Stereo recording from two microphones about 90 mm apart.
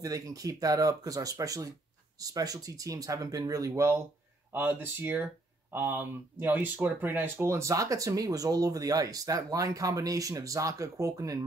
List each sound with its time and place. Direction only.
0.0 s speech: 40° right (ahead or behind)